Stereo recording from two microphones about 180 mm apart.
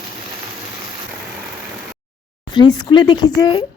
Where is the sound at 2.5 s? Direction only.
25° left (ahead or behind).